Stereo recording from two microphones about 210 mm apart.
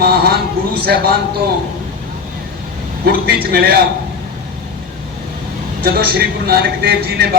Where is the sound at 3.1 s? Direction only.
45° right (ahead or behind).